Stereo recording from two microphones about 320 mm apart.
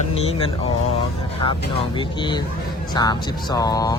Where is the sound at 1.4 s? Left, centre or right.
Centre.